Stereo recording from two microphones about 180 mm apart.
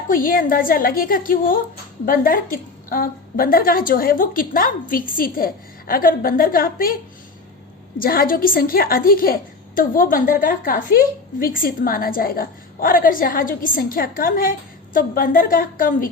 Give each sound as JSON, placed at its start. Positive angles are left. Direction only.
{"t": 0.1, "sound": "a woman's voice", "side_deg": 50}